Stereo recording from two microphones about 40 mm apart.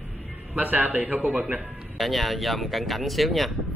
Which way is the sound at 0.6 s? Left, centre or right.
Right.